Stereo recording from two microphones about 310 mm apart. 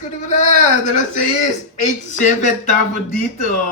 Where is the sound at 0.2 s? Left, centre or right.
Left.